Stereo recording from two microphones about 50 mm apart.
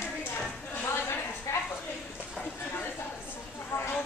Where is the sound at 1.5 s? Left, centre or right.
Left.